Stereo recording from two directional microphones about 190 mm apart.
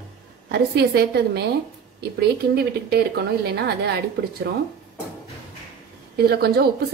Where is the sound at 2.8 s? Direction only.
60° right (ahead or behind).